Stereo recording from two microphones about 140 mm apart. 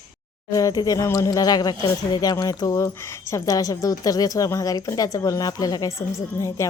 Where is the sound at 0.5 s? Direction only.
25° left (ahead or behind).